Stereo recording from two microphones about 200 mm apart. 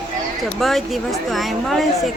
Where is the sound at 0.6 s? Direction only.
Centre (ahead or behind).